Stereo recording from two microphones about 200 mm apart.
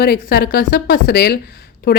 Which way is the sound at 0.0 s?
50° left (ahead or behind).